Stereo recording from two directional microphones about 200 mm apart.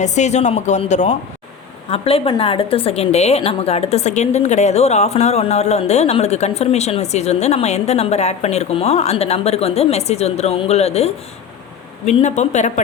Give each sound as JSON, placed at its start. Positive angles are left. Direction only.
{"t": 0.0, "sound": "a woman's voice", "side_deg": 35}